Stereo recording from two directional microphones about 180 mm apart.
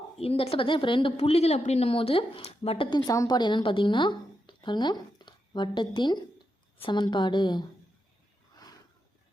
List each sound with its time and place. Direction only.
0.2 s a woman's voice: 35° left (ahead or behind)